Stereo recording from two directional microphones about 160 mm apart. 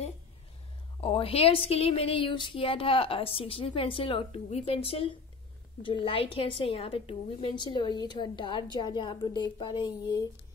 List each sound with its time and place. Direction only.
1.0 s a woman's voice: 35° left (ahead or behind)